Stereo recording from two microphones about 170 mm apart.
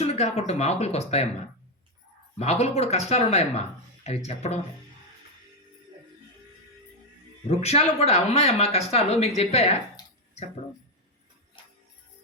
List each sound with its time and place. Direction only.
0.0 s a sound: 40° left (ahead or behind)
0.3 s speech: 40° left (ahead or behind)
2.4 s speech: 40° left (ahead or behind)
7.4 s speech: 40° left (ahead or behind)